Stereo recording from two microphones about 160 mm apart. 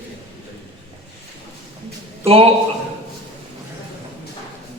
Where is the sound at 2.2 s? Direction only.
35° right (ahead or behind).